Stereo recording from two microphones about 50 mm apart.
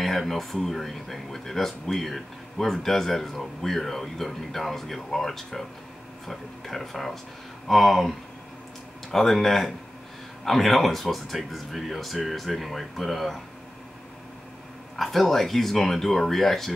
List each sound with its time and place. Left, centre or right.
0.0 s speech: centre
15.0 s speech: centre